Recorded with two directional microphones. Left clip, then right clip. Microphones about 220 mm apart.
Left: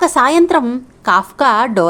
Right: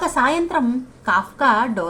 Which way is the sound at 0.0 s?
50° left (ahead or behind).